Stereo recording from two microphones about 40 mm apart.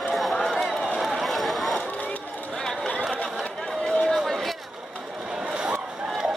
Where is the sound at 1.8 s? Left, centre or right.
Left.